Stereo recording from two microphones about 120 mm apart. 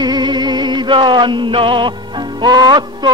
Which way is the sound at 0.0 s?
35° right (ahead or behind).